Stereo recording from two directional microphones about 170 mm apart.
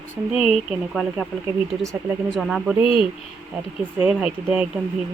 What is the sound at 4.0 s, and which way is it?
Speech, 5° right (ahead or behind).